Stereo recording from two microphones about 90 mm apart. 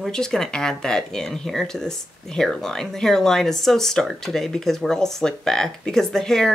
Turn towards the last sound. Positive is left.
turn(degrees=5)  # may be behind; listen again after turning